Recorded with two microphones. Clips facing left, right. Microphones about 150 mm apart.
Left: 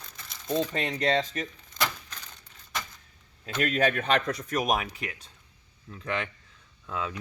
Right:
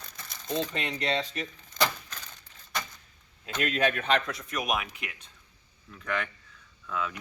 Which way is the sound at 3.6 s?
45° left (ahead or behind).